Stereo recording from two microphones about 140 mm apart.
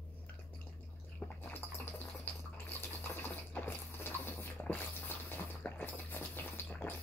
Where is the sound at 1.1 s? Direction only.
15° left (ahead or behind).